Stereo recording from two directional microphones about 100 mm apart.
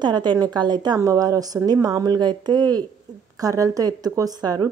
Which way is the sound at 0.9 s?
35° right (ahead or behind).